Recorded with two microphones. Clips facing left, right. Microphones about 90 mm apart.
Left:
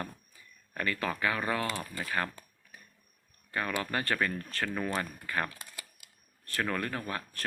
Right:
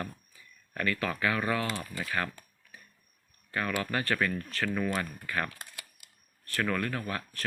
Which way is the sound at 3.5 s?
30° left (ahead or behind).